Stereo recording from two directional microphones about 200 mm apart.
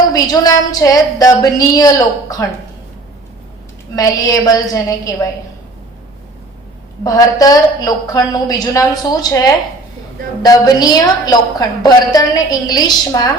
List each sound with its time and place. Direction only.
0.1 s a woman's voice: 20° left (ahead or behind)
3.9 s a woman's voice: 15° left (ahead or behind)
7.0 s a woman's voice: 15° left (ahead or behind)